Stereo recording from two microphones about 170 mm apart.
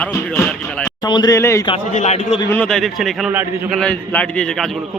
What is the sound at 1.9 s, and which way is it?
Speech, 40° left (ahead or behind).